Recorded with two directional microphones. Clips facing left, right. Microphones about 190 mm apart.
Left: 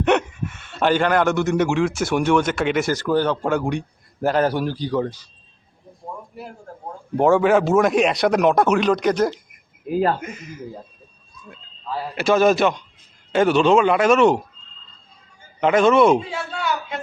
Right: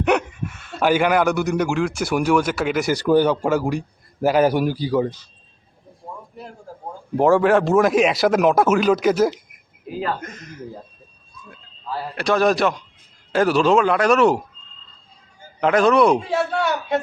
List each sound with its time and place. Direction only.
0.0 s speech: centre (ahead or behind)
3.0 s a man's voice: 15° right (ahead or behind)
7.2 s speech: centre (ahead or behind)
9.9 s speech: 45° left (ahead or behind)
10.2 s speech: 10° left (ahead or behind)
12.1 s speech: 5° left (ahead or behind)
15.6 s speech: centre (ahead or behind)
16.3 s a man's voice: 60° right (ahead or behind)